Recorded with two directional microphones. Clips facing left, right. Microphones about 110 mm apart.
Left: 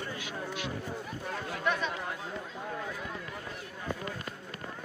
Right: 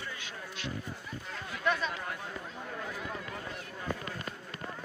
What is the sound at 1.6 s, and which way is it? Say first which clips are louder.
Chatter: right 1 dB; 20° left (ahead or behind).